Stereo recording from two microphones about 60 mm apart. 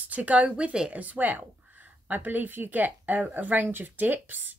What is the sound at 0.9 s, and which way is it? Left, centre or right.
Speech, right.